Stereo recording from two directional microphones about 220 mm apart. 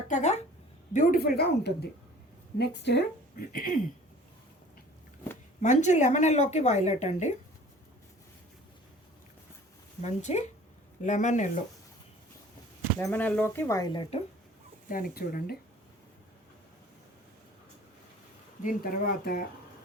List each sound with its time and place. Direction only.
0.1 s a woman's voice: 30° left (ahead or behind)
5.5 s speech: 35° left (ahead or behind)
10.0 s speech: 30° left (ahead or behind)
13.0 s speech: 10° left (ahead or behind)
14.8 s speech: 40° left (ahead or behind)
18.6 s speech: 40° left (ahead or behind)